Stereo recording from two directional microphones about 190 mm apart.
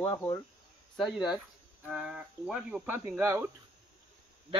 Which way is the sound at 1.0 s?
5° right (ahead or behind).